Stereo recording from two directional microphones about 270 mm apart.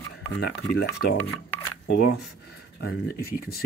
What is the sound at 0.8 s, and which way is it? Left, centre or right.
Speech, centre.